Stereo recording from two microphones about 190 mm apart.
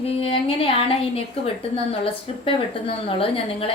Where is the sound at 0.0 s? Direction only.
30° left (ahead or behind).